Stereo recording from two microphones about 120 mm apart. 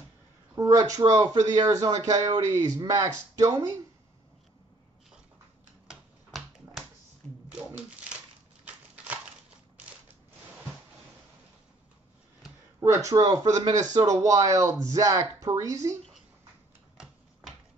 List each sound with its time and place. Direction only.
0.6 s speech: 25° right (ahead or behind)
5.9 s finger snapping: centre (ahead or behind)
7.5 s a sound: 10° right (ahead or behind)
12.8 s speech: 25° right (ahead or behind)